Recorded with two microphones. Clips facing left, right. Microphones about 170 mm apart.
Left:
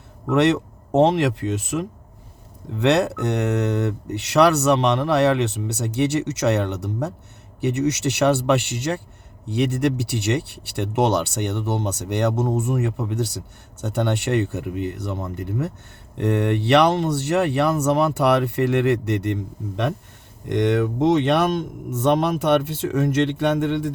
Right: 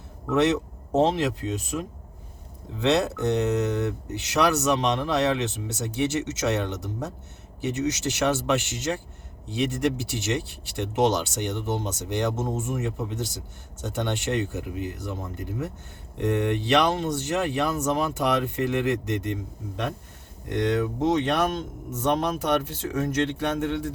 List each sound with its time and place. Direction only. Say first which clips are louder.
0.3 s speech: left 4 dB; 65° left (ahead or behind)
20.7 s speech: left 5 dB; 70° left (ahead or behind)